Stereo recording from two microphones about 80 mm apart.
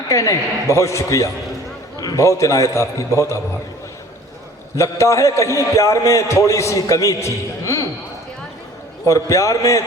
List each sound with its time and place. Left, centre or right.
0.1 s a man's voice: left
4.8 s a man's voice: left
9.0 s a man's voice: left